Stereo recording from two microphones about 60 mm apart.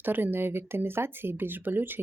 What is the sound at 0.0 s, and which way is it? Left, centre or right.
Speech, right.